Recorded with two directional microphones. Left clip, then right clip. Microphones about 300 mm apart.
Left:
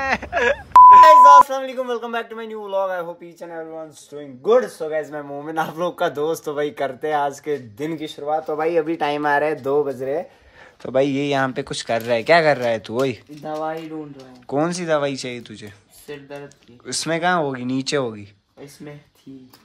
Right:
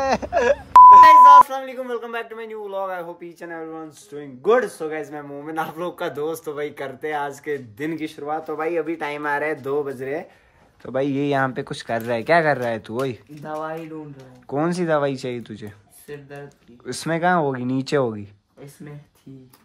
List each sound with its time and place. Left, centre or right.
0.0 s a sound: centre
1.6 s speech: centre
16.8 s speech: centre